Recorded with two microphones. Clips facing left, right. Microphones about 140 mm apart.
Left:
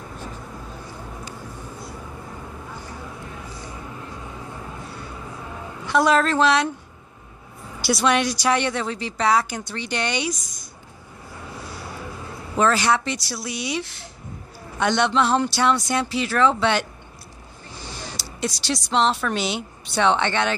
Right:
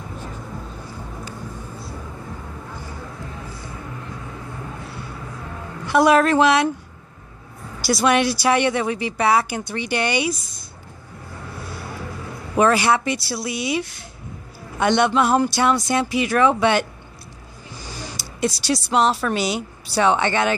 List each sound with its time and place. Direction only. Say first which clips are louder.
5.9 s speech: right 3 dB; 10° right (ahead or behind)
7.8 s speech: right 2 dB; centre (ahead or behind)
12.5 s speech: right 3 dB; 10° right (ahead or behind)
15.0 s speech: right 2 dB; 10° right (ahead or behind)
18.5 s speech: right 1 dB; 10° right (ahead or behind)